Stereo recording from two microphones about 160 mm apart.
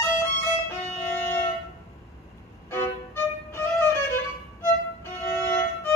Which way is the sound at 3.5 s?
15° left (ahead or behind).